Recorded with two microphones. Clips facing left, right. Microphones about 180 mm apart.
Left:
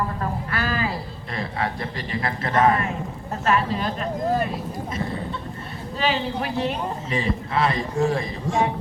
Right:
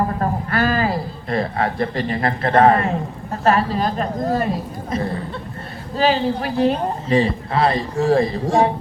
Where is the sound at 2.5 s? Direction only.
35° right (ahead or behind).